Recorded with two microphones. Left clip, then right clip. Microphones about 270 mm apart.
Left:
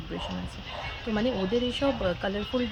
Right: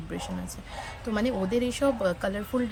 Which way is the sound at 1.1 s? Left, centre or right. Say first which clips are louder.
Even; centre.